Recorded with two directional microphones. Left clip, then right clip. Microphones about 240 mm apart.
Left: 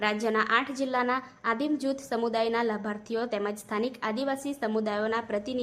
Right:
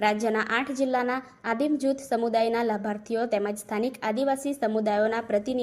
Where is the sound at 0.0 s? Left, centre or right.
Centre.